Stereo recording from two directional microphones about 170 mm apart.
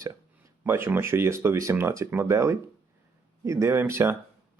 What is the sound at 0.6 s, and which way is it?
A man's voice, 15° right (ahead or behind).